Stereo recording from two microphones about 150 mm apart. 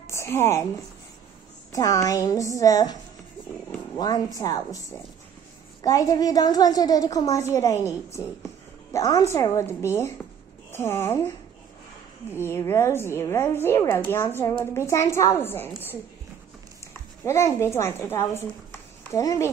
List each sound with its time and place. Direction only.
0.0 s a woman's voice: 20° left (ahead or behind)
1.7 s a woman's voice: 20° left (ahead or behind)
12.4 s a woman's voice: 15° left (ahead or behind)
17.2 s a woman's voice: 20° left (ahead or behind)
19.0 s a woman's voice: 20° left (ahead or behind)